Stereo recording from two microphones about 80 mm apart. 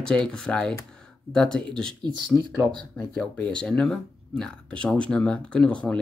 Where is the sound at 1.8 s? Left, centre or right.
Right.